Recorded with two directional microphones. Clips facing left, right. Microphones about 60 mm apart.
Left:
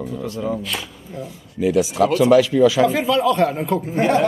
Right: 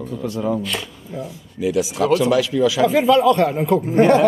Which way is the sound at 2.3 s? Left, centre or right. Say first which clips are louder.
Left 4 dB; left.